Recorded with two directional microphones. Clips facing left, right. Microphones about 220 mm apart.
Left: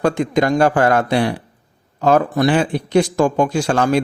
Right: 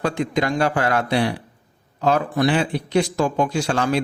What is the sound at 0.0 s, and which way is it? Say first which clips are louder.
A man's voice: left 5 dB; 50° left (ahead or behind).